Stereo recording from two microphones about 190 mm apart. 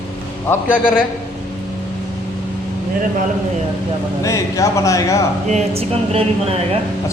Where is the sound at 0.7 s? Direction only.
5° right (ahead or behind).